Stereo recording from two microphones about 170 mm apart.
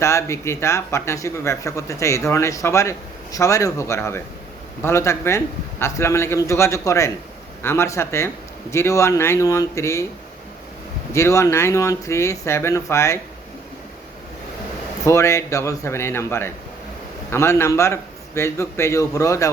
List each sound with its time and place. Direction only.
0.0 s speech: 15° left (ahead or behind)
11.1 s speech: 15° left (ahead or behind)
15.0 s speech: 15° left (ahead or behind)